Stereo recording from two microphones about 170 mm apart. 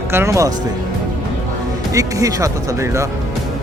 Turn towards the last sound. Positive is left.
turn(degrees=-20)  # may be behind; listen again after turning